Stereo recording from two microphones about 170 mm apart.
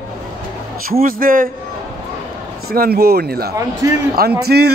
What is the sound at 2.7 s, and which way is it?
Speech, 65° right (ahead or behind).